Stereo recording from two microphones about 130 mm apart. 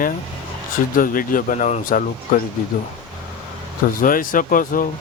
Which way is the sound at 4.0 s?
90° left.